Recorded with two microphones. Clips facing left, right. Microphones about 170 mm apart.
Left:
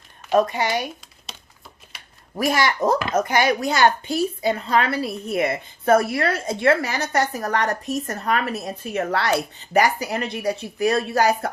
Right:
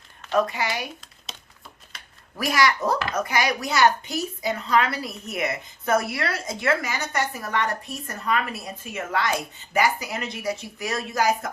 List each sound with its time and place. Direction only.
0.3 s speech: 25° left (ahead or behind)
2.3 s speech: 25° left (ahead or behind)
5.8 s a woman's voice: 55° left (ahead or behind)
6.4 s speech: 30° left (ahead or behind)